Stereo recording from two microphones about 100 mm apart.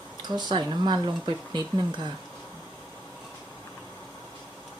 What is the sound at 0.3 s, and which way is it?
Speech, 50° right (ahead or behind).